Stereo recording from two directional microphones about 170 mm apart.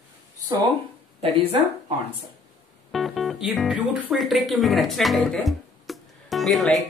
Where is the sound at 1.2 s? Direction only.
35° right (ahead or behind).